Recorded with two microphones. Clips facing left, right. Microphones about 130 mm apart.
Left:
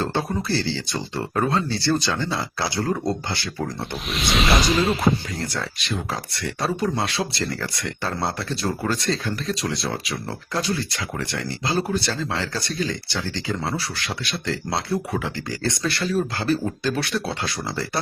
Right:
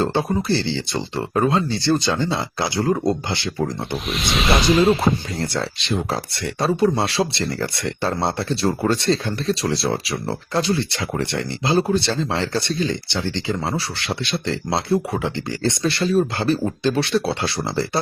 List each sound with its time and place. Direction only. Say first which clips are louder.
0.0 s speech: right 4 dB; 20° right (ahead or behind)
3.9 s speech: left 2 dB; centre (ahead or behind)
5.4 s speech: right 4 dB; 30° right (ahead or behind)